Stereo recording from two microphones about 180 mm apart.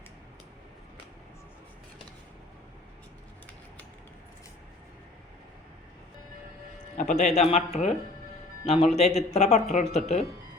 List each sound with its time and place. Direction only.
6.9 s speech: 45° left (ahead or behind)